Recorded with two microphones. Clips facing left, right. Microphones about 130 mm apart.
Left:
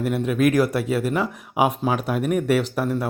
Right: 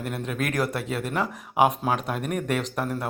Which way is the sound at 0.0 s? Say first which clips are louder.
Left 9 dB; 5° left (ahead or behind).